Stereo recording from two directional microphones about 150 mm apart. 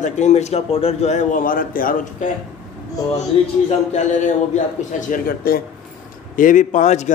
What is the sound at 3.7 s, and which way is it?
Speech, 50° left (ahead or behind).